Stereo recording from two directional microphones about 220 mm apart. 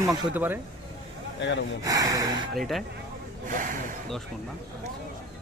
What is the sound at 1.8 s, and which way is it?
Speech, 15° right (ahead or behind).